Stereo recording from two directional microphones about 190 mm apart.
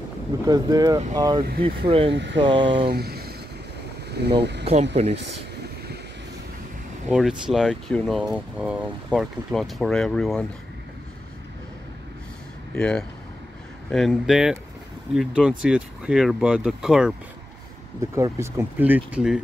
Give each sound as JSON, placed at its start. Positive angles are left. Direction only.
{"t": 0.5, "sound": "speech", "side_deg": -20}
{"t": 2.1, "sound": "speech", "side_deg": -65}
{"t": 2.6, "sound": "speech", "side_deg": -25}
{"t": 2.9, "sound": "speech", "side_deg": -55}
{"t": 5.0, "sound": "speech", "side_deg": -35}
{"t": 7.1, "sound": "speech", "side_deg": -5}
{"t": 12.7, "sound": "speech", "side_deg": 5}
{"t": 18.1, "sound": "speech", "side_deg": -15}